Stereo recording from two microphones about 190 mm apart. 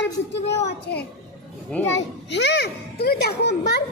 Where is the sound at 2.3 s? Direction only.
65° left (ahead or behind).